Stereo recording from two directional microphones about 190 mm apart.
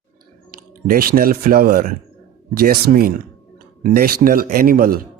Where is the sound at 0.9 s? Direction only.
50° right (ahead or behind).